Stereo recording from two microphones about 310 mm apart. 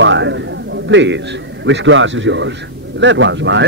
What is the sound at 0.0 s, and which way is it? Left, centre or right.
A man's voice, right.